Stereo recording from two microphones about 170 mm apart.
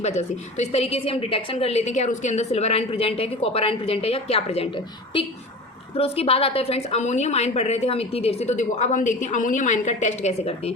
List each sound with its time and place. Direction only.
0.0 s a woman's voice: 40° left (ahead or behind)
5.9 s a woman's voice: 35° left (ahead or behind)